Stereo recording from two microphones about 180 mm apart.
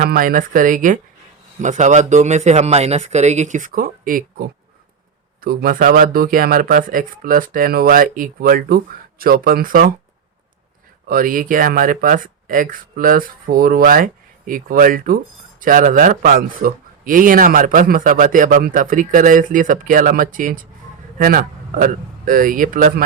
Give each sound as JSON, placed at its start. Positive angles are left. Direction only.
{"t": 0.0, "sound": "speech", "side_deg": -50}
{"t": 11.1, "sound": "speech", "side_deg": -50}